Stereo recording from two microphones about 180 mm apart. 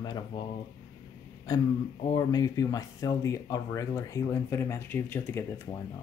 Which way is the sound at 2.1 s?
20° left (ahead or behind).